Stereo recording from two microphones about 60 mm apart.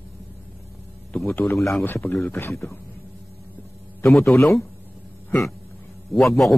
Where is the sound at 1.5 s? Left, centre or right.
Left.